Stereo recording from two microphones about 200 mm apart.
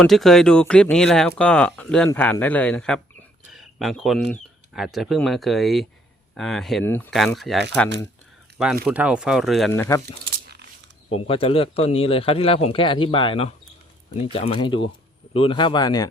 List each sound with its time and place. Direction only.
0.0 s speech: centre (ahead or behind)
3.5 s a sound: centre (ahead or behind)
4.7 s speech: centre (ahead or behind)
11.1 s a man's voice: 25° left (ahead or behind)